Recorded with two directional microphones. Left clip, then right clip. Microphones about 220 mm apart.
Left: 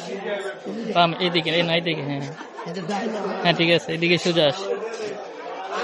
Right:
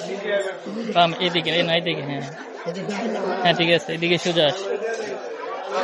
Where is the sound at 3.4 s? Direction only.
30° left (ahead or behind).